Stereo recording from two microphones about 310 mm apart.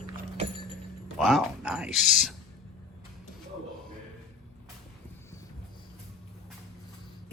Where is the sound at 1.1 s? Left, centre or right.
Centre.